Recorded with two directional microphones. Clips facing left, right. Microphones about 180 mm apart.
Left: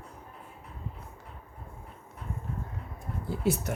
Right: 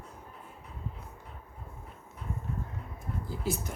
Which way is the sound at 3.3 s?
70° left (ahead or behind).